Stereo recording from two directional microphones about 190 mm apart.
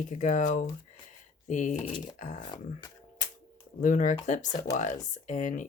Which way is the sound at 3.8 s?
40° left (ahead or behind).